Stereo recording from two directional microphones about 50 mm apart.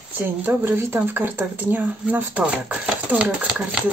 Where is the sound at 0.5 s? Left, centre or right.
Right.